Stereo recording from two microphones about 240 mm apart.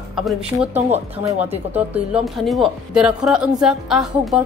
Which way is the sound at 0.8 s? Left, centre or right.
Right.